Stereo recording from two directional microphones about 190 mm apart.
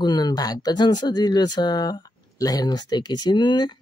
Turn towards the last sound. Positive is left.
turn(degrees=25)  # may be behind; listen again after turning